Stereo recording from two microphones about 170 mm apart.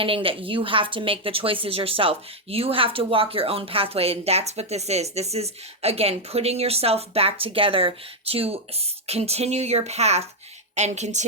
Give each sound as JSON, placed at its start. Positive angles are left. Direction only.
{"t": 0.0, "sound": "a woman's voice", "side_deg": -30}